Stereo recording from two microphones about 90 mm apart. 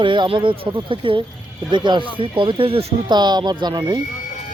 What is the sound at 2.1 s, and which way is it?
Speech, 80° right.